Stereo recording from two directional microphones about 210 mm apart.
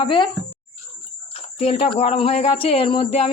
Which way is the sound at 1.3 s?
30° left (ahead or behind).